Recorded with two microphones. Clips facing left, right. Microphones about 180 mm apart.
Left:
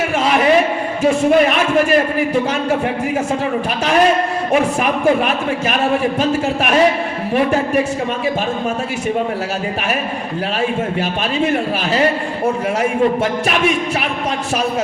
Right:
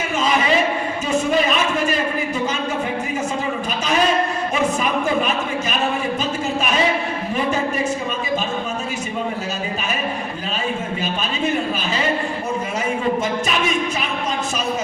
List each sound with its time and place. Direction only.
0.2 s a sound: 80° left
1.0 s speech: 75° left (ahead or behind)
4.8 s a man's voice: 75° left (ahead or behind)